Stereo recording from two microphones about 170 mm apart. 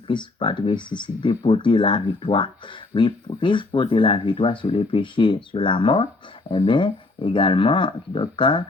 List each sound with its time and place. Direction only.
0.1 s speech: 30° left (ahead or behind)